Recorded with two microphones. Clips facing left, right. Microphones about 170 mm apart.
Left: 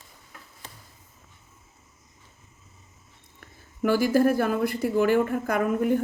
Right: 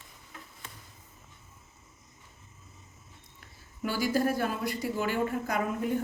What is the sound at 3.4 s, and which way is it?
Speech, 55° left (ahead or behind).